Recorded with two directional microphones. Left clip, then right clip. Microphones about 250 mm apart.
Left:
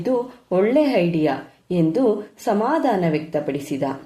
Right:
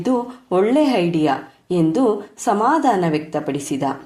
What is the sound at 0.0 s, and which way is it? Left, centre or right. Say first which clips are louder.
A woman's voice: right 1 dB; centre.